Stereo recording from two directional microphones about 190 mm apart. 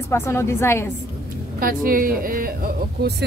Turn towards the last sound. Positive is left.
turn(degrees=-55)  # may be behind; listen again after turning